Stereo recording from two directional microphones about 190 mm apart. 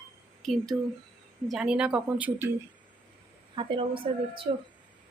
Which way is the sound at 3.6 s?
25° right (ahead or behind).